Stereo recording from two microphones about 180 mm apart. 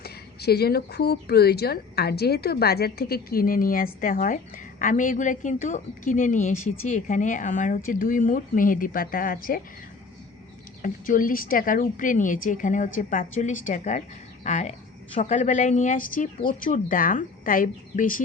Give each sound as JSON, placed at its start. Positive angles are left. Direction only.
{"t": 0.0, "sound": "speech", "side_deg": 60}
{"t": 10.8, "sound": "speech", "side_deg": 50}